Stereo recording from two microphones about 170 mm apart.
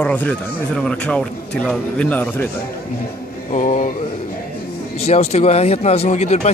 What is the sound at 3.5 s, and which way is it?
Speech, 50° left (ahead or behind).